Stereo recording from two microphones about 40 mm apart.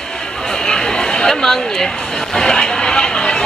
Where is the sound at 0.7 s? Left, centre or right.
Centre.